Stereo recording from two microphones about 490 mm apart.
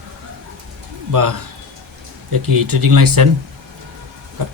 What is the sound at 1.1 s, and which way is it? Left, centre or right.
Speech, right.